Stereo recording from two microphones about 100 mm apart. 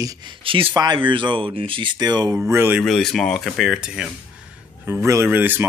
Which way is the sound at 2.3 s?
20° right (ahead or behind).